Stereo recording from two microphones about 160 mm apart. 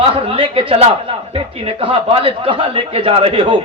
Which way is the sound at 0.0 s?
35° right (ahead or behind).